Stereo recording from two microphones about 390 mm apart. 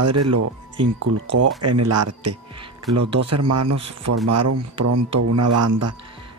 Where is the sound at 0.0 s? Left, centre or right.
Right.